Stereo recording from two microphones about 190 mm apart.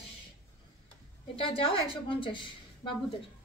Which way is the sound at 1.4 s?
30° left (ahead or behind).